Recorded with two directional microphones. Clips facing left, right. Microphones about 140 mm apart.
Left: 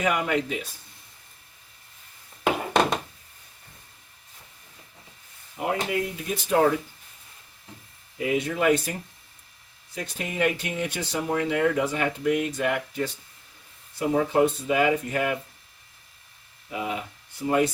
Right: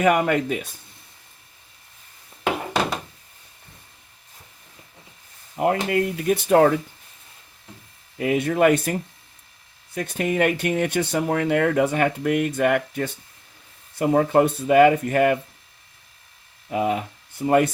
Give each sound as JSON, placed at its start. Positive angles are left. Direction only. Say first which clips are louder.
{"t": 0.0, "sound": "speech", "louder": "right 6 dB", "side_deg": -50}
{"t": 5.5, "sound": "speech", "louder": "right 6 dB", "side_deg": -55}
{"t": 8.2, "sound": "speech", "louder": "right 5 dB", "side_deg": -55}
{"t": 16.6, "sound": "speech", "louder": "right 8 dB", "side_deg": -50}